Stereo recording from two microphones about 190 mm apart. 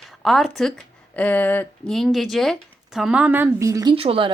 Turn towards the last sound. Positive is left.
turn(degrees=-30)  # may be behind; listen again after turning